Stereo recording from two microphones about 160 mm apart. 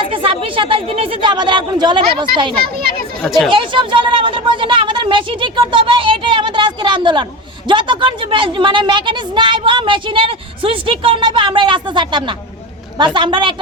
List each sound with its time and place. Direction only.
0.1 s a woman's voice: 35° right (ahead or behind)
3.2 s speech: centre (ahead or behind)
3.5 s a woman's voice: 30° right (ahead or behind)